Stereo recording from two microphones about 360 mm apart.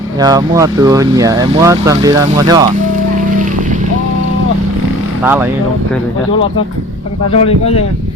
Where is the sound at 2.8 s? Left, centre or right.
Right.